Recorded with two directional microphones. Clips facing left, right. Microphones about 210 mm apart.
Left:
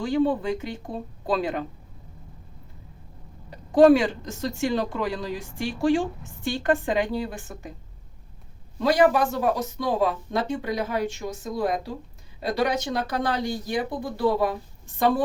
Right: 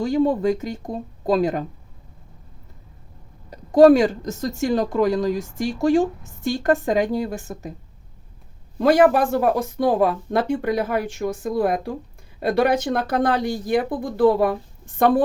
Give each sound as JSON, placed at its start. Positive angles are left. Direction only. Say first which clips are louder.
{"t": 0.0, "sound": "speech", "louder": "right 4 dB", "side_deg": -40}
{"t": 3.5, "sound": "speech", "louder": "right 3 dB", "side_deg": -45}
{"t": 8.8, "sound": "speech", "louder": "right 4 dB", "side_deg": -55}